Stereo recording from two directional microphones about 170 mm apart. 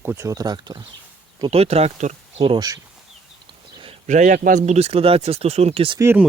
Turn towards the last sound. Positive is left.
turn(degrees=-15)  # may be behind; listen again after turning